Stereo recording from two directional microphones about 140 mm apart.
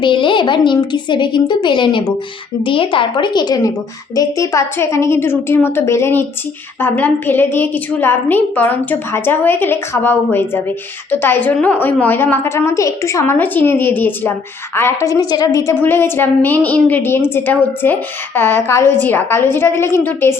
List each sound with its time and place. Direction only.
0.0 s a woman's voice: 35° left (ahead or behind); by 20.3 s 15° left (ahead or behind)